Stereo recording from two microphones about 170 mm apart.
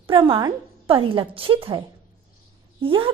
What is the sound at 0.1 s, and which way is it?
A woman's voice, 30° right (ahead or behind).